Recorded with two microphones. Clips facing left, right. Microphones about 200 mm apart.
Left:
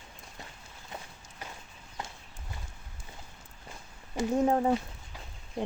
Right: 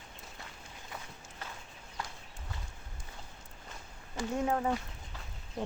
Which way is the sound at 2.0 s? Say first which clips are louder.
Left 1 dB; 20° left (ahead or behind).